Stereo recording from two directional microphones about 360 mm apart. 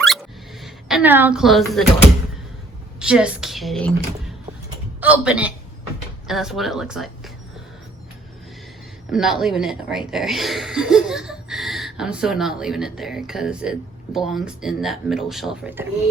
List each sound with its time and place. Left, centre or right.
0.6 s a woman's voice: centre
3.0 s a woman's voice: centre
4.9 s a man's voice: centre
9.1 s a woman's voice: centre